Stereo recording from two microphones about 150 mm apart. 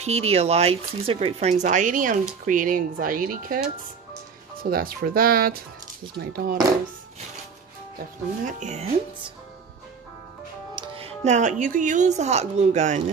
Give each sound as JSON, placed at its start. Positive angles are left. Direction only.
{"t": 0.0, "sound": "speech", "side_deg": -45}
{"t": 4.6, "sound": "speech", "side_deg": -75}
{"t": 8.5, "sound": "speech", "side_deg": -55}
{"t": 10.7, "sound": "music", "side_deg": -30}
{"t": 11.2, "sound": "speech", "side_deg": -55}